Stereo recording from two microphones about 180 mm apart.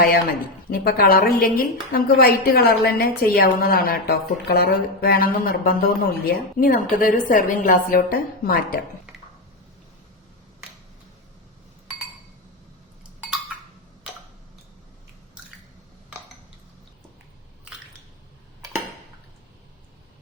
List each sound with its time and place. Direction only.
0.7 s a woman's voice: 55° left (ahead or behind)
15.4 s squish: 5° right (ahead or behind)
17.7 s squish: 5° right (ahead or behind)